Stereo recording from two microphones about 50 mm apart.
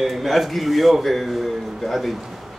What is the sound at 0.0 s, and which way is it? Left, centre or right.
A man's voice, centre.